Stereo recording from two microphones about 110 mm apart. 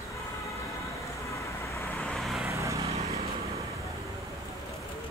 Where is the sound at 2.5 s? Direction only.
30° right (ahead or behind).